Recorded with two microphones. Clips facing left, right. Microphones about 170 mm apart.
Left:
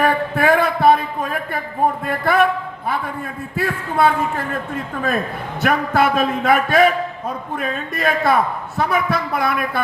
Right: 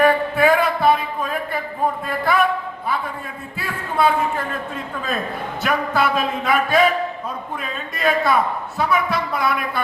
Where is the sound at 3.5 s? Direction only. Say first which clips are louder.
Left 4 dB; 50° left (ahead or behind).